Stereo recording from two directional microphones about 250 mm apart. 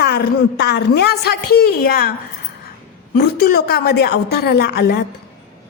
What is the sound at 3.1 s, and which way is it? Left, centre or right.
A woman's voice, left.